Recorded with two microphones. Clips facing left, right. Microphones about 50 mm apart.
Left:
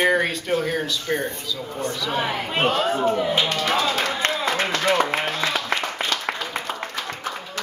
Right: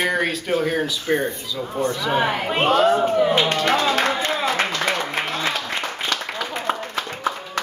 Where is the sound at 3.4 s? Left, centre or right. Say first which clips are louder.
Right 3 dB; right.